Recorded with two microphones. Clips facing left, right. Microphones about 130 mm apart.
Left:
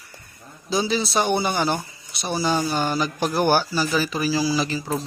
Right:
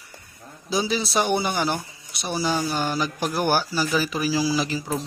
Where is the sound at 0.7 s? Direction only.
5° right (ahead or behind).